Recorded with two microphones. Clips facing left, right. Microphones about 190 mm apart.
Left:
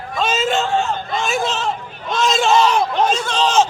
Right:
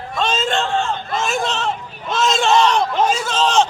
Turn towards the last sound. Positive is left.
turn(degrees=0)  # may be behind; listen again after turning